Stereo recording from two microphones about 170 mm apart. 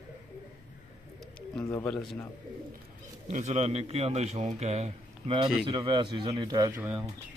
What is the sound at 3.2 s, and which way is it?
A man's voice, 40° right (ahead or behind).